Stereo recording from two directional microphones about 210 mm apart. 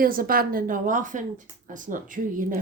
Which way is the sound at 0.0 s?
45° right (ahead or behind).